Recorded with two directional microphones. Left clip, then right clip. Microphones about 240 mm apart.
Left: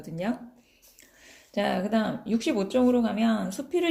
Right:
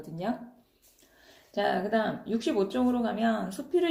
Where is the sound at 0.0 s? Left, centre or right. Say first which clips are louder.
Left 2 dB; left.